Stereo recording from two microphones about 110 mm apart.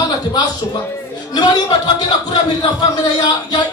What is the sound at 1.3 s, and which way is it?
Speech, 40° left (ahead or behind).